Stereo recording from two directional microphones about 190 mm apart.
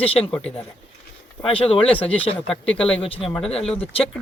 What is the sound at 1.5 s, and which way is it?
Speech, 30° left (ahead or behind).